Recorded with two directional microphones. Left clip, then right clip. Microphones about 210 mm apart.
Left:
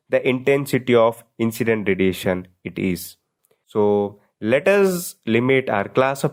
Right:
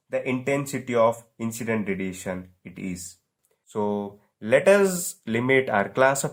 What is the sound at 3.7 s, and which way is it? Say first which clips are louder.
Speech: left 9 dB; 25° left (ahead or behind).